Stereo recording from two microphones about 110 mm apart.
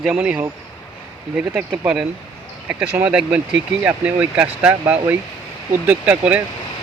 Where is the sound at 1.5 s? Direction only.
15° right (ahead or behind).